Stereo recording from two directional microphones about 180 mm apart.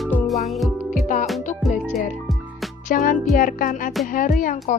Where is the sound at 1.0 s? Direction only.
45° left (ahead or behind).